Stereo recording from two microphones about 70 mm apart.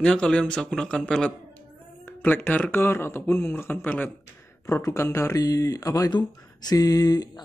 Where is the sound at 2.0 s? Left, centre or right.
Left.